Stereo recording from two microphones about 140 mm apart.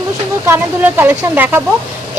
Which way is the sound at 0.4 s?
15° right (ahead or behind).